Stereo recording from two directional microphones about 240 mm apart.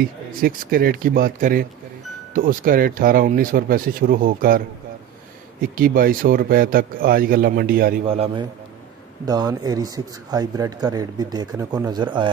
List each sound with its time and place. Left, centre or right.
0.0 s a man's voice: right
5.6 s a man's voice: right
8.0 s a man's voice: right